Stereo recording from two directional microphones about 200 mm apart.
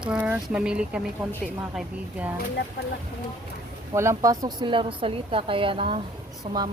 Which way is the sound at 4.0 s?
15° right (ahead or behind).